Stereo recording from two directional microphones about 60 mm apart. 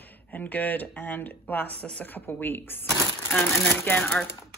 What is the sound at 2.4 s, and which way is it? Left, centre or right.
Speech, left.